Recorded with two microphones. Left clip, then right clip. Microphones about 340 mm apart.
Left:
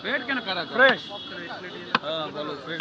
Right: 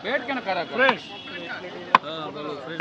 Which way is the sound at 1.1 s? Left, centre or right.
Right.